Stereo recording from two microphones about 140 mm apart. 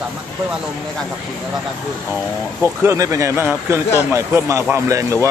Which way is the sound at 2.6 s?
20° right (ahead or behind).